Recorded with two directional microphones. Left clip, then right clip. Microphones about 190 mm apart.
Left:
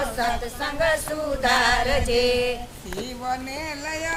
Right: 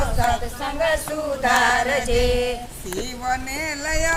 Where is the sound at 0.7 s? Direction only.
10° left (ahead or behind).